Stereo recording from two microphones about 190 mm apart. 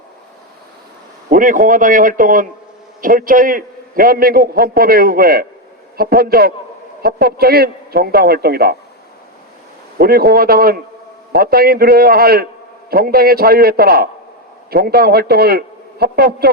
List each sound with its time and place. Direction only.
1.3 s a man's voice: 45° right (ahead or behind)
10.0 s a man's voice: 55° right (ahead or behind)